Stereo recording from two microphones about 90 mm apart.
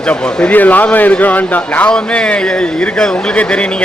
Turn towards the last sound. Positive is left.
turn(degrees=10)  # may be behind; listen again after turning